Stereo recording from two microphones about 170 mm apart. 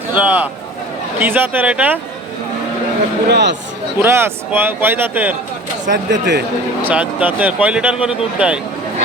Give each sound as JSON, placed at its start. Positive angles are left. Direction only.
{"t": 0.1, "sound": "a man's voice", "side_deg": -10}
{"t": 3.2, "sound": "speech", "side_deg": -80}
{"t": 3.9, "sound": "a man's voice", "side_deg": -15}
{"t": 5.9, "sound": "speech", "side_deg": -90}
{"t": 6.8, "sound": "a man's voice", "side_deg": -10}